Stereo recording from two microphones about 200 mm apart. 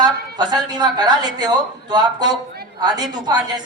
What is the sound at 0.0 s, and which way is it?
A woman's voice, 20° right (ahead or behind).